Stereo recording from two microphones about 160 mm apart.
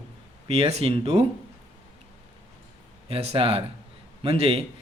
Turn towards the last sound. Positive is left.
turn(degrees=-35)  # may be behind; listen again after turning